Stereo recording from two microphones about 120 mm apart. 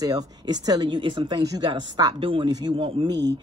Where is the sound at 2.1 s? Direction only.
45° right (ahead or behind).